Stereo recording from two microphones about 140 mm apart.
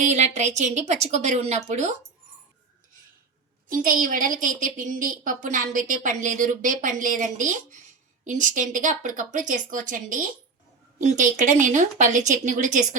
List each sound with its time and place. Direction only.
0.0 s a woman's voice: 55° right (ahead or behind)
3.7 s a woman's voice: 80° right; by 13.0 s 65° right (ahead or behind)